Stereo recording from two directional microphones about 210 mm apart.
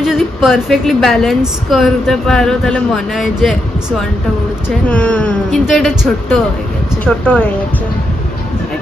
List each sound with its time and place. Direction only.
0.0 s a woman's voice: centre (ahead or behind)
4.6 s a woman's voice: 5° left (ahead or behind)
7.1 s a woman's voice: 5° left (ahead or behind)